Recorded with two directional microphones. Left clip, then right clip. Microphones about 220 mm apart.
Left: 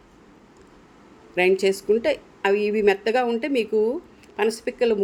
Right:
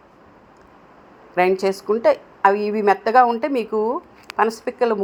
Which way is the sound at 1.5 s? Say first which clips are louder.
Even; 5° right (ahead or behind).